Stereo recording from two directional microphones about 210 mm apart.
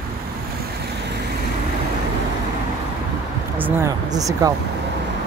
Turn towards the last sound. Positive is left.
turn(degrees=-15)  # may be behind; listen again after turning